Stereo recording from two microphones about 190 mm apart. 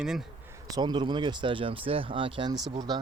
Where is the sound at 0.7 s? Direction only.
20° right (ahead or behind).